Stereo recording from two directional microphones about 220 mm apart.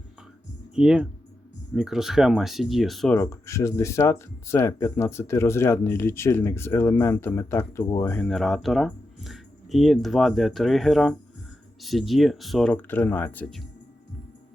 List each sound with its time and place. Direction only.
0.7 s speech: 5° right (ahead or behind)
3.2 s speech: 10° left (ahead or behind)